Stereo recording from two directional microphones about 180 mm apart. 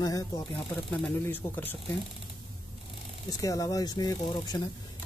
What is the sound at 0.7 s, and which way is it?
Speech, 5° left (ahead or behind).